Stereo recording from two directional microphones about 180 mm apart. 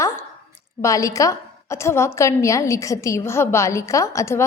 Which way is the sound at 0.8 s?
15° left (ahead or behind).